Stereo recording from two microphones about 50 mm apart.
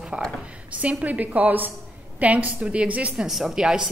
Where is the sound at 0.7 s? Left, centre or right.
Right.